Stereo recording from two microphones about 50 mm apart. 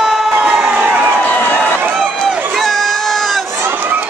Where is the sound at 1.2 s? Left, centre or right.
Left.